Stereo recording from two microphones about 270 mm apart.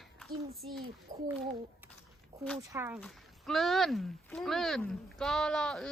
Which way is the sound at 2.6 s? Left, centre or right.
Centre.